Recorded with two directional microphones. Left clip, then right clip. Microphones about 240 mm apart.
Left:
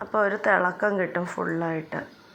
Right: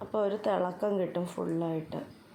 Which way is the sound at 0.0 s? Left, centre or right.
Centre.